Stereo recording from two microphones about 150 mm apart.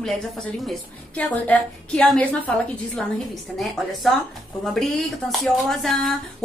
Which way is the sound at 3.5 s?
Centre (ahead or behind).